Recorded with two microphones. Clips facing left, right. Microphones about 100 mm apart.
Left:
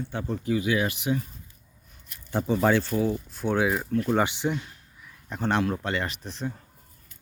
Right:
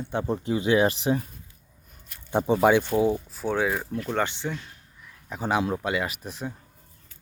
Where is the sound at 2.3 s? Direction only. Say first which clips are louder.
Right 3 dB; 15° right (ahead or behind).